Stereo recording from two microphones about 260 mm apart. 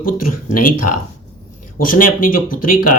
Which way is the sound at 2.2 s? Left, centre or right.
Left.